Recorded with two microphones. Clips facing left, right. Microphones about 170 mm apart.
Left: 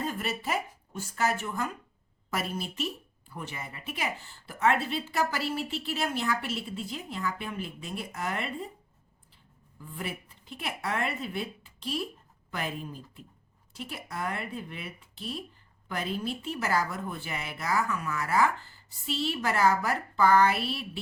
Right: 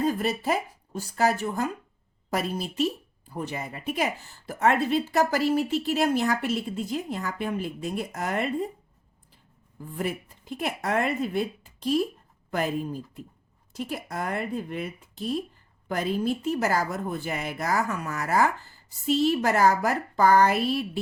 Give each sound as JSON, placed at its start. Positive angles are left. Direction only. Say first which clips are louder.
{"t": 0.0, "sound": "speech", "louder": "right 7 dB", "side_deg": -40}
{"t": 9.7, "sound": "a woman's voice", "louder": "right 7 dB", "side_deg": -45}